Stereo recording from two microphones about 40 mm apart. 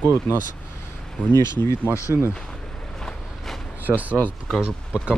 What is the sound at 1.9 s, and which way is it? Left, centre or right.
Speech, right.